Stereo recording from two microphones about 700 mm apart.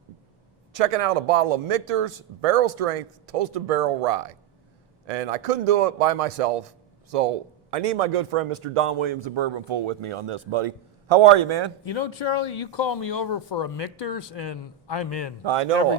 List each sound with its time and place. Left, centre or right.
0.7 s a man's voice: right
11.9 s speech: left